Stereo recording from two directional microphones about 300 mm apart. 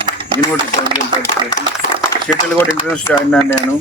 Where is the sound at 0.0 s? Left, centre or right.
Centre.